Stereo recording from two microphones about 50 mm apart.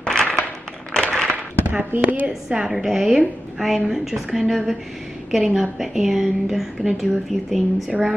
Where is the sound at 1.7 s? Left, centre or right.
Right.